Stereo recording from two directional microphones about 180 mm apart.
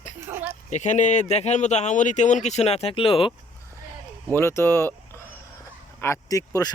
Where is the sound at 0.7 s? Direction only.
40° left (ahead or behind).